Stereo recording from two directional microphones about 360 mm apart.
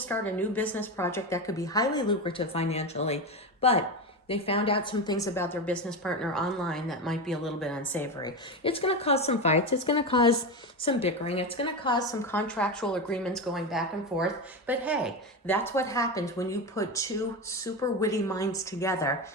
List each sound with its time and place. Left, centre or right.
0.1 s a woman's voice: centre